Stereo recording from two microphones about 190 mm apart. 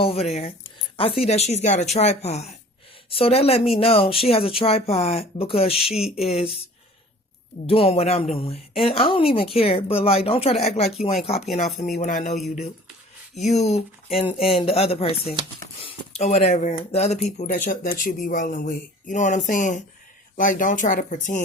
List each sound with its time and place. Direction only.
0.0 s speech: 35° left (ahead or behind)
7.7 s speech: 30° left (ahead or behind)
12.3 s speech: centre (ahead or behind)
13.4 s speech: 35° left (ahead or behind)